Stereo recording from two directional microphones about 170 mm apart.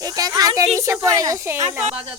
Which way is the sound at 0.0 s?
20° right (ahead or behind).